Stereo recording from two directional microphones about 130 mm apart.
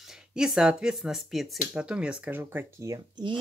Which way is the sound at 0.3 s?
5° right (ahead or behind).